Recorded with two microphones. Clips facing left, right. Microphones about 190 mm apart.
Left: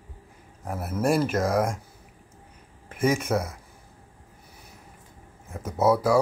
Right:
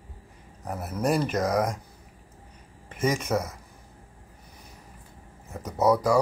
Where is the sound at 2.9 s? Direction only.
10° left (ahead or behind).